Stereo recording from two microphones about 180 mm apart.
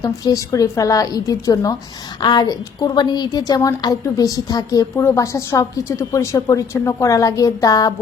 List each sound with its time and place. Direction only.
0.0 s a woman's voice: 20° left (ahead or behind)